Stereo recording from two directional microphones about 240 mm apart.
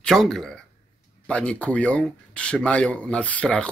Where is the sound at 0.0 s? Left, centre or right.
Centre.